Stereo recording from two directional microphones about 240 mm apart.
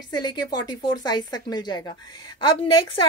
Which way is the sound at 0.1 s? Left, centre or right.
Centre.